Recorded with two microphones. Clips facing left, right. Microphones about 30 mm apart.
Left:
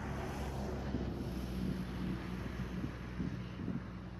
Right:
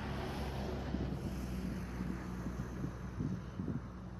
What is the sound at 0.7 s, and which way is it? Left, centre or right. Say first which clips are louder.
Vehicle: even; centre.